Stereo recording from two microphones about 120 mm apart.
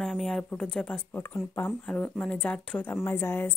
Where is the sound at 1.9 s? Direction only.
10° left (ahead or behind).